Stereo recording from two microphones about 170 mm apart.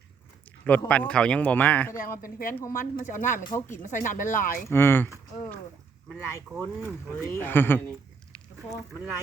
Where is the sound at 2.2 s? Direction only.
55° left (ahead or behind).